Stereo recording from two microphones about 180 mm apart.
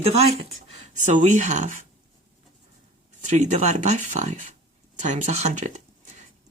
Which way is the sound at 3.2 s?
40° right (ahead or behind).